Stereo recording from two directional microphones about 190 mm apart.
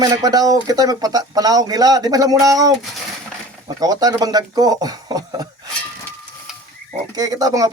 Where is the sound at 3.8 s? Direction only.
20° right (ahead or behind).